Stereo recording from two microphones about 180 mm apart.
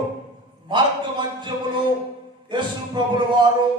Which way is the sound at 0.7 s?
25° right (ahead or behind).